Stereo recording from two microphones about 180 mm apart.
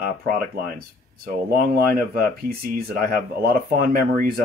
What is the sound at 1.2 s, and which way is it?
Speech, 55° right (ahead or behind).